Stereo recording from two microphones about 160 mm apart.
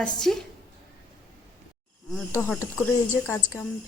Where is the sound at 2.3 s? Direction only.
15° left (ahead or behind).